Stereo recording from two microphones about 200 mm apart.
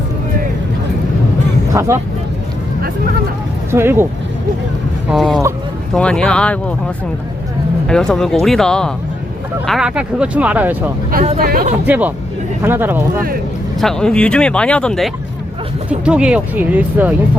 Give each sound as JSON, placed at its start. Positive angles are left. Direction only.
{"t": 1.7, "sound": "speech", "side_deg": -15}
{"t": 3.7, "sound": "speech", "side_deg": -10}
{"t": 5.0, "sound": "speech", "side_deg": 0}
{"t": 7.9, "sound": "speech", "side_deg": 5}
{"t": 11.3, "sound": "speech", "side_deg": -45}
{"t": 11.9, "sound": "speech", "side_deg": -10}
{"t": 13.7, "sound": "speech", "side_deg": 5}